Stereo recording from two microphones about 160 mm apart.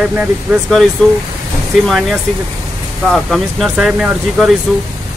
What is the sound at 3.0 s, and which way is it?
Speech, centre (ahead or behind).